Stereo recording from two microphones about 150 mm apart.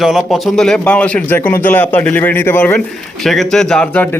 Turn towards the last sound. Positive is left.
turn(degrees=10)  # may be behind; listen again after turning